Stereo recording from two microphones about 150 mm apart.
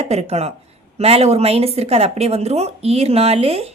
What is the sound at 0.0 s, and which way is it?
A woman's voice, 45° right (ahead or behind).